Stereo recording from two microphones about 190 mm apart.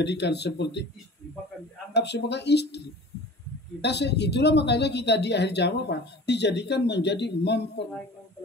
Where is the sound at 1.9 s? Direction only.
65° left (ahead or behind).